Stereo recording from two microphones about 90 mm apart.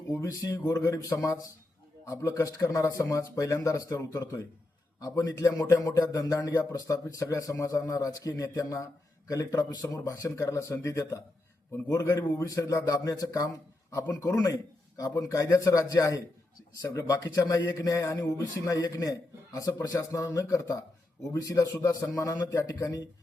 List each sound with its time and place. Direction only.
0.1 s a man's voice: 35° left (ahead or behind)